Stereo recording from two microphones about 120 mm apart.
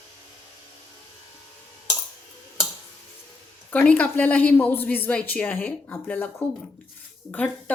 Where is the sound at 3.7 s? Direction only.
10° left (ahead or behind).